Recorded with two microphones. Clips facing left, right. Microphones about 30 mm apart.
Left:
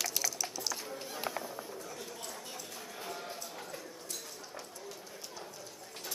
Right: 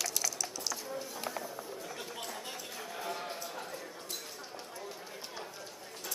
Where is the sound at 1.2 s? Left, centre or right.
Centre.